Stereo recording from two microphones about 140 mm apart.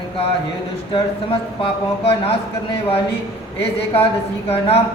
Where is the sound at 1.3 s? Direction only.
40° left (ahead or behind).